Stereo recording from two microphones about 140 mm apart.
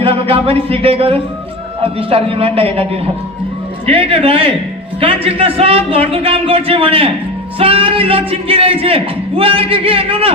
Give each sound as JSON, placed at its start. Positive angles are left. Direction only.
{"t": 0.0, "sound": "a man's voice", "side_deg": -45}
{"t": 3.8, "sound": "a man's voice", "side_deg": -40}